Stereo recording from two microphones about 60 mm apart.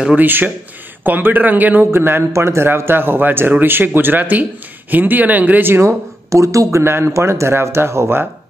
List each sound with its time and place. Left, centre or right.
0.1 s a man's voice: right
1.9 s a man's voice: right
6.3 s speech: right
6.8 s speech: right